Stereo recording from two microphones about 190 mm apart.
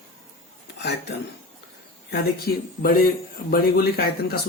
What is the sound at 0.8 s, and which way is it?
Speech, 60° left (ahead or behind).